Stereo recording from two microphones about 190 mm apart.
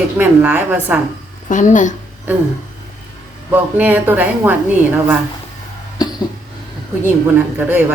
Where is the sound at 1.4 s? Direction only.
40° left (ahead or behind).